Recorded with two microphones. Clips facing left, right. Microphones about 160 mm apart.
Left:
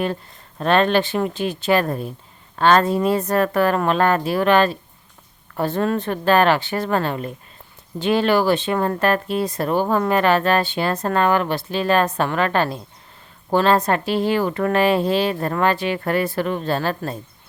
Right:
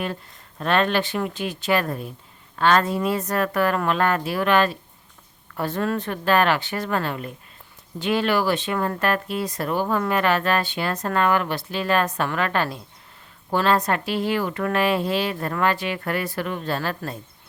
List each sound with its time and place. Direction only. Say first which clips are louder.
0.6 s a woman's voice: left 4 dB; 30° left (ahead or behind)